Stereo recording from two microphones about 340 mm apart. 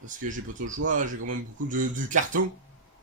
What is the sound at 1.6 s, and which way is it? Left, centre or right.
Speech, right.